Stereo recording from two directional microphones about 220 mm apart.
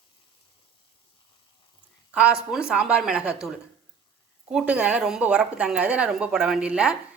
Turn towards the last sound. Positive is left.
turn(degrees=-5)  # may be behind; listen again after turning